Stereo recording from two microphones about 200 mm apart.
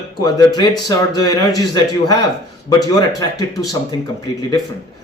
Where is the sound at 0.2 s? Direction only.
20° left (ahead or behind).